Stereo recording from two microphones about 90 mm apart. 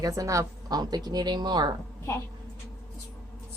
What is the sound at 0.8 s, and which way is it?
Speech, 50° right (ahead or behind).